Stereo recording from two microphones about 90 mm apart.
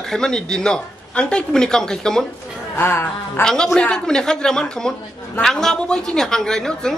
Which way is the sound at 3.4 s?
5° left (ahead or behind).